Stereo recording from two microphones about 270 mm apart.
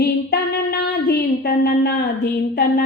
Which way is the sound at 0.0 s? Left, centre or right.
Left.